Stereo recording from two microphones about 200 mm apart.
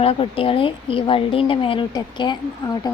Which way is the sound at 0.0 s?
30° left (ahead or behind).